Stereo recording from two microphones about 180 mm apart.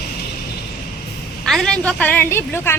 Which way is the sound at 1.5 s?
Centre (ahead or behind).